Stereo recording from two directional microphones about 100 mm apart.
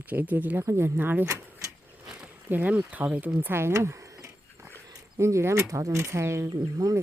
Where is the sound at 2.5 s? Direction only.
15° right (ahead or behind); by 7.0 s 35° right (ahead or behind).